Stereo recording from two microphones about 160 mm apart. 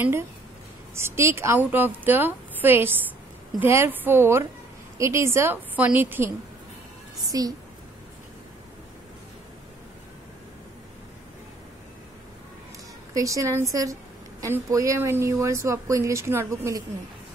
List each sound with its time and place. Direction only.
0.9 s speech: 15° right (ahead or behind)
7.2 s a woman's voice: 25° right (ahead or behind)
13.1 s a woman's voice: 20° right (ahead or behind)